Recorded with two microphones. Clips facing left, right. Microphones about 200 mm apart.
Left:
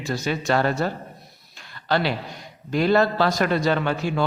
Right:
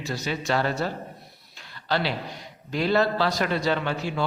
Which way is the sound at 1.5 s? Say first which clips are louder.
Left 3 dB; 50° left (ahead or behind).